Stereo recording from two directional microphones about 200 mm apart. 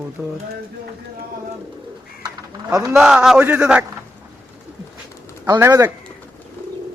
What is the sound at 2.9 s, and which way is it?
Speech, 5° right (ahead or behind).